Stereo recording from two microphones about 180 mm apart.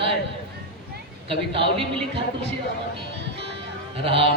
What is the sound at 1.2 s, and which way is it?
Speech, 30° right (ahead or behind).